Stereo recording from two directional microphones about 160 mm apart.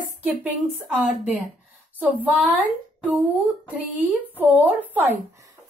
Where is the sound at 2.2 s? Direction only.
5° right (ahead or behind).